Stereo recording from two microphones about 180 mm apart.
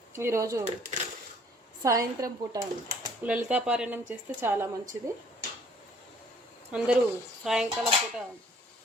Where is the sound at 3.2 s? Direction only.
5° right (ahead or behind).